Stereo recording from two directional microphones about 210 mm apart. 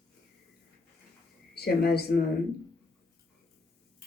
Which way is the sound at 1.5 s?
50° left (ahead or behind).